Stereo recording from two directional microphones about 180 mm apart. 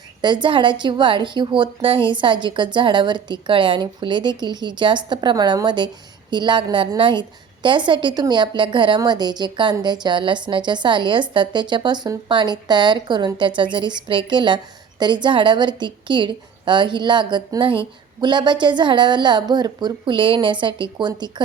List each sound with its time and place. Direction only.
0.2 s a woman's voice: 25° right (ahead or behind)